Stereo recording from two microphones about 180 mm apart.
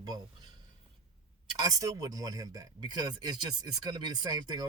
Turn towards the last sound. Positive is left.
turn(degrees=-20)  # may be behind; listen again after turning